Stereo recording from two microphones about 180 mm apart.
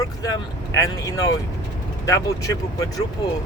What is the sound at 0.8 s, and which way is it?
Speech, 20° left (ahead or behind).